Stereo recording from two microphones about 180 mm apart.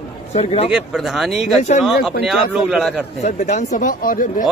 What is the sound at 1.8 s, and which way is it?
Speech, centre (ahead or behind).